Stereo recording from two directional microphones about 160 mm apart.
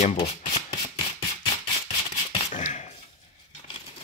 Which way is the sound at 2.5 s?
45° left (ahead or behind).